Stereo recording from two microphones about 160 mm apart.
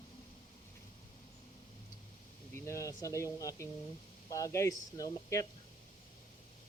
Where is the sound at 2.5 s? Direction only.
15° left (ahead or behind).